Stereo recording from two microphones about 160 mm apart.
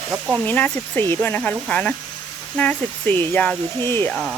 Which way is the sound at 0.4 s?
10° left (ahead or behind).